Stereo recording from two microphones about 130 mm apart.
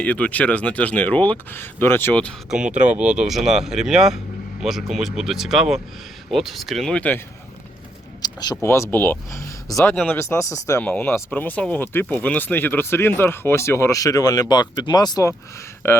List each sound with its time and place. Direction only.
0.0 s speech: 10° left (ahead or behind)
2.5 s speech: 10° right (ahead or behind); by 7.2 s 10° left (ahead or behind)
8.2 s a sound: 30° left (ahead or behind)
8.6 s speech: 20° left (ahead or behind)
9.9 s speech: 5° left (ahead or behind)
10.2 s speech: 20° left (ahead or behind)
15.8 s speech: 15° left (ahead or behind)